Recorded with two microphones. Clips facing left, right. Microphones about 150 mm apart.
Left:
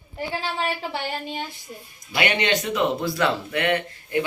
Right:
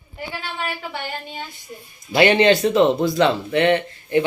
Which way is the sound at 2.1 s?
30° right (ahead or behind).